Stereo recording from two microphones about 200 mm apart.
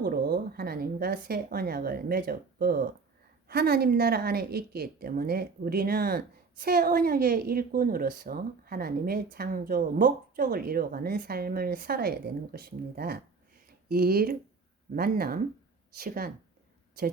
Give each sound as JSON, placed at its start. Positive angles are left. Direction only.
{"t": 0.0, "sound": "a woman's voice", "side_deg": -50}